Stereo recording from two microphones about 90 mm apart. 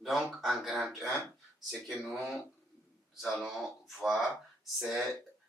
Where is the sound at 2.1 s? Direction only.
Centre (ahead or behind).